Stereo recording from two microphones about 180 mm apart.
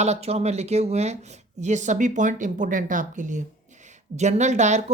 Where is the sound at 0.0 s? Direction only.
35° right (ahead or behind).